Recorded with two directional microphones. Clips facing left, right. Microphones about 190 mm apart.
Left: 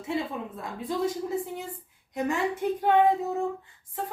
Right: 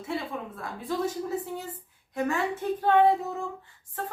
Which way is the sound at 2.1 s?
20° left (ahead or behind).